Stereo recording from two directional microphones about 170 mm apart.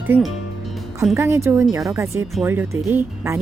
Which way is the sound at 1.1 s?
15° right (ahead or behind).